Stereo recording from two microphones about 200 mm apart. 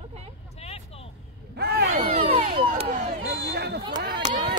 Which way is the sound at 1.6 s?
55° right (ahead or behind).